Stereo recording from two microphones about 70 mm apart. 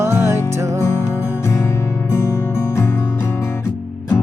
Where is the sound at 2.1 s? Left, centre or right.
Left.